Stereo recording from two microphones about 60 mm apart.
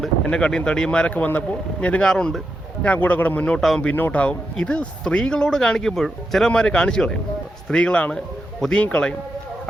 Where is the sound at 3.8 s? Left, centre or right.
Left.